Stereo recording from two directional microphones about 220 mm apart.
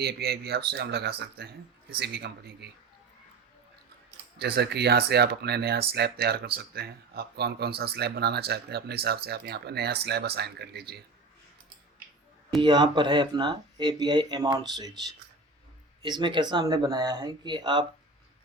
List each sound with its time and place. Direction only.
0.0 s speech: 45° right (ahead or behind)
4.4 s speech: 45° right (ahead or behind)
12.6 s speech: 20° right (ahead or behind)
16.0 s speech: 20° right (ahead or behind)